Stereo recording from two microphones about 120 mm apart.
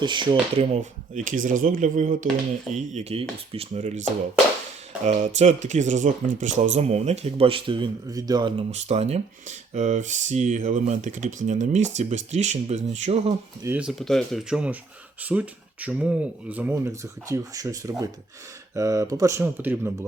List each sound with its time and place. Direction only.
0.0 s speech: 40° right (ahead or behind)
0.6 s speech: 75° right (ahead or behind)
2.9 s speech: 60° right (ahead or behind)
8.0 s speech: 30° right (ahead or behind)
8.5 s speech: 65° right (ahead or behind)
13.6 s speech: 25° right (ahead or behind)
14.0 s speech: 5° left (ahead or behind); by 20.1 s 15° right (ahead or behind)